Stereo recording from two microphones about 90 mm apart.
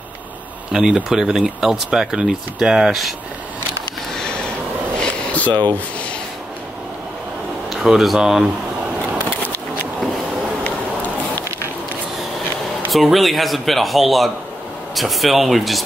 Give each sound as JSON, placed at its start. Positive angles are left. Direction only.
{"t": 0.7, "sound": "speech", "side_deg": -5}
{"t": 4.1, "sound": "a sound", "side_deg": 10}
{"t": 5.5, "sound": "speech", "side_deg": -55}
{"t": 7.7, "sound": "speech", "side_deg": -5}
{"t": 12.9, "sound": "speech", "side_deg": 0}